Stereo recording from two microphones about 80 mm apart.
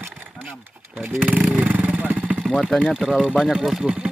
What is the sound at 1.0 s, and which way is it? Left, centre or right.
Speech, right.